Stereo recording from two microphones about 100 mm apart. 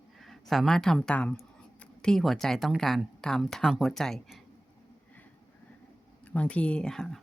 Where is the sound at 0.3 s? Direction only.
Centre (ahead or behind).